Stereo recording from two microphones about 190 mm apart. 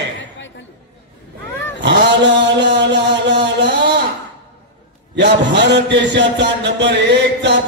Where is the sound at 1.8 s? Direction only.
65° right (ahead or behind).